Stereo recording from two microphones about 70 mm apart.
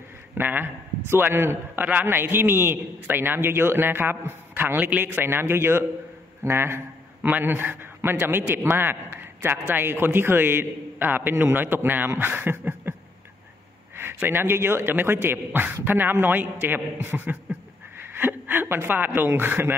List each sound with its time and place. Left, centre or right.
0.3 s a man's voice: right
13.9 s a man's voice: right